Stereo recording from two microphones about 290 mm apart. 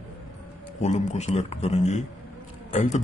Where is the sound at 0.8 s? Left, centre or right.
Left.